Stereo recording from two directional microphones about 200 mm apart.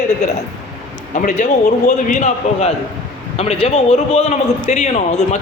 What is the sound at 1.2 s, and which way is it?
A man's voice, 40° left (ahead or behind).